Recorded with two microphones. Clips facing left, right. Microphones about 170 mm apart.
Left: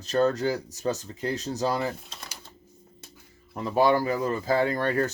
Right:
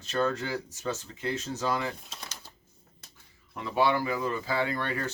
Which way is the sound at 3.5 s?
40° left (ahead or behind).